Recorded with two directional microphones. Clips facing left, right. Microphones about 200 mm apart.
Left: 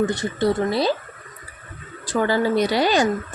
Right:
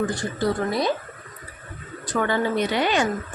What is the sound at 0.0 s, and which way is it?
Speech, 20° left (ahead or behind).